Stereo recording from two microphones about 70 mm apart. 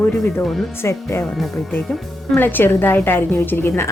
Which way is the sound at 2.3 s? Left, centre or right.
Left.